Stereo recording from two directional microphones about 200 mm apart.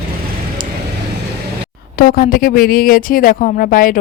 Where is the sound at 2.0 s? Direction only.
45° left (ahead or behind).